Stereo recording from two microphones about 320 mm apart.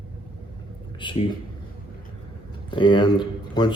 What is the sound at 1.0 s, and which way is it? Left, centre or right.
Speech, centre.